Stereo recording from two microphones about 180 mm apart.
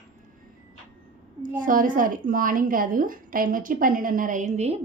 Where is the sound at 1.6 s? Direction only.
50° right (ahead or behind).